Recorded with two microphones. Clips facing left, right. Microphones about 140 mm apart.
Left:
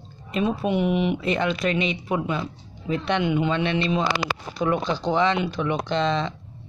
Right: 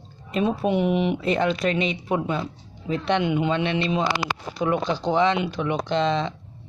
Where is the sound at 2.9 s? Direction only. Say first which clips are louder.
Right 1 dB; 25° right (ahead or behind).